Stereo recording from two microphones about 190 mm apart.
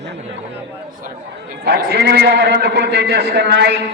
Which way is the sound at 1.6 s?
60° right (ahead or behind).